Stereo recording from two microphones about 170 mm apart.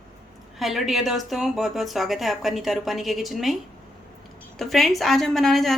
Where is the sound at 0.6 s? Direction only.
Centre (ahead or behind).